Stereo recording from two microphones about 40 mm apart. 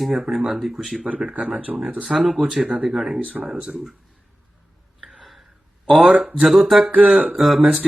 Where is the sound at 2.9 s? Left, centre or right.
Centre.